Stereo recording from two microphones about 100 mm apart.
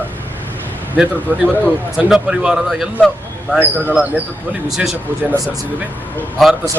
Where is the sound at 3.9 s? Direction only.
10° right (ahead or behind).